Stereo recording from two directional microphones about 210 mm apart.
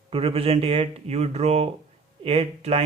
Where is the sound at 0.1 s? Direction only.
25° right (ahead or behind).